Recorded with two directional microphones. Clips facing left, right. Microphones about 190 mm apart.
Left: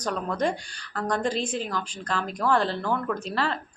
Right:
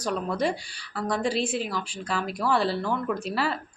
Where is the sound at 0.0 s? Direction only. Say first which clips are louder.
Even; 5° right (ahead or behind).